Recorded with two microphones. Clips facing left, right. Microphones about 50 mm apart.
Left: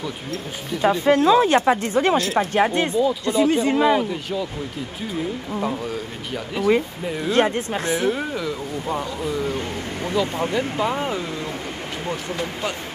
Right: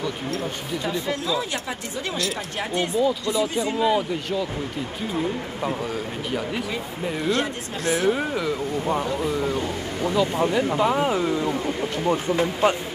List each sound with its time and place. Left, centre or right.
0.8 s speech: left
5.6 s speech: centre
7.2 s speech: left
8.0 s speech: centre
10.1 s speech: centre
12.1 s speech: right